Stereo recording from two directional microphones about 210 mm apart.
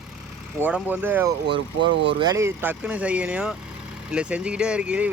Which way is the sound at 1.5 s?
60° right (ahead or behind).